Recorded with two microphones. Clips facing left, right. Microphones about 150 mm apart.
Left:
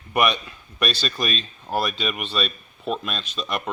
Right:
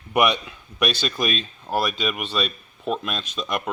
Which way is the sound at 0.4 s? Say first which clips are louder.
Right 2 dB; 10° right (ahead or behind).